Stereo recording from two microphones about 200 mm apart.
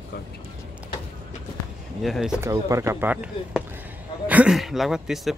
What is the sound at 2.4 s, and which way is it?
Speech, 15° right (ahead or behind).